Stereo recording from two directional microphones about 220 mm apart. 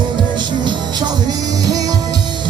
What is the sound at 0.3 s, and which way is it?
Music, 20° right (ahead or behind).